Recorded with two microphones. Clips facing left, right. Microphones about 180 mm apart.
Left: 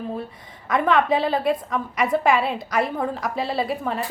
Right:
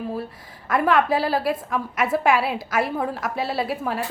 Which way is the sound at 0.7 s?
5° right (ahead or behind).